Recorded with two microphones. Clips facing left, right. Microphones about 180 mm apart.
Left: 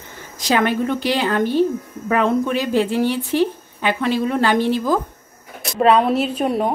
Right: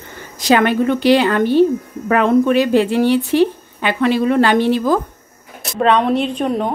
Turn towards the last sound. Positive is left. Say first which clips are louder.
# right 1 dB
turn(degrees=5)  # may be behind; listen again after turning